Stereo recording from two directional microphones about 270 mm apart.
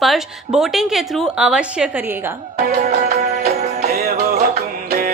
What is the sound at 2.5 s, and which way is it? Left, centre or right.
Music, right.